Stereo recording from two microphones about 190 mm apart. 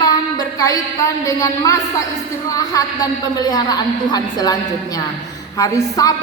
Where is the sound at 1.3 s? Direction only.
15° left (ahead or behind).